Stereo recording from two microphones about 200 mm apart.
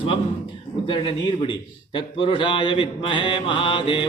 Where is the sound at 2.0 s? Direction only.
25° left (ahead or behind).